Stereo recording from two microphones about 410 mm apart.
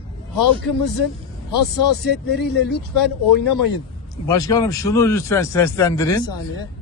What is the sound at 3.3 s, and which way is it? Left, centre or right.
Speech, left.